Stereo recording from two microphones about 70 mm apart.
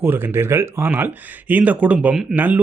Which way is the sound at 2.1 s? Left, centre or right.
Centre.